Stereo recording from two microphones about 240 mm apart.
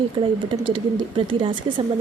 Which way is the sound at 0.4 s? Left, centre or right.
Right.